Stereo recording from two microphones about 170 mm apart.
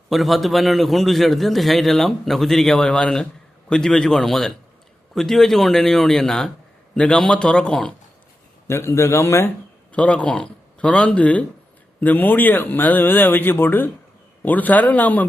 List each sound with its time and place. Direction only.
0.1 s a man's voice: centre (ahead or behind)
8.6 s a man's voice: 15° left (ahead or behind)